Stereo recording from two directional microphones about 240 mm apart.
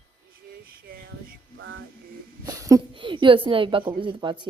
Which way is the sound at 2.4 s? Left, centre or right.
Centre.